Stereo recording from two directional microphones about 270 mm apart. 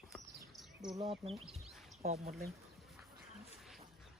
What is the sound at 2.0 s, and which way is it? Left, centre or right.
Speech, right.